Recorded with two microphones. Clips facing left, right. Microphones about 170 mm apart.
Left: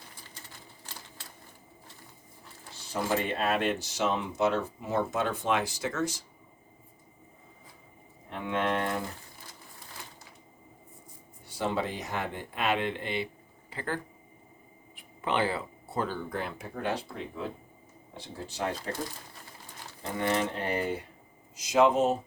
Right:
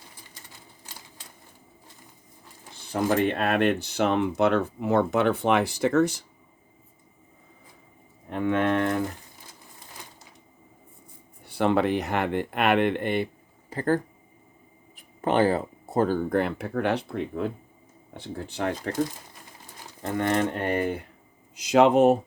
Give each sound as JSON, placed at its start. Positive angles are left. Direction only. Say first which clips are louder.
{"t": 2.7, "sound": "speech", "louder": "right 6 dB", "side_deg": -55}
{"t": 8.3, "sound": "speech", "louder": "right 6 dB", "side_deg": -55}
{"t": 11.4, "sound": "speech", "louder": "right 8 dB", "side_deg": -60}
{"t": 13.7, "sound": "speech", "louder": "right 10 dB", "side_deg": -45}
{"t": 20.0, "sound": "speech", "louder": "right 4 dB", "side_deg": -50}